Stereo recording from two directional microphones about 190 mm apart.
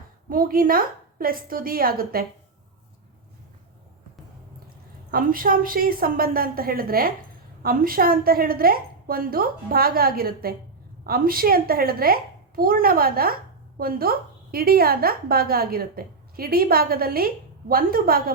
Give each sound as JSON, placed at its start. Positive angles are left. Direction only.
{"t": 0.3, "sound": "a woman's voice", "side_deg": -50}
{"t": 5.1, "sound": "a woman's voice", "side_deg": -50}